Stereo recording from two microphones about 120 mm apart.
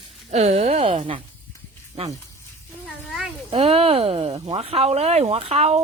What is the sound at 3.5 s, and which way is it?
Speech, 55° right (ahead or behind).